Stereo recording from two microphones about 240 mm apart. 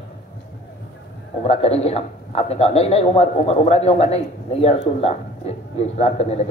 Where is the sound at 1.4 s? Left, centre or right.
Left.